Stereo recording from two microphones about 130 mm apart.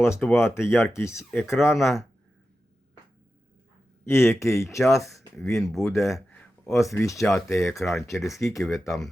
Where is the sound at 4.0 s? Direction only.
20° left (ahead or behind).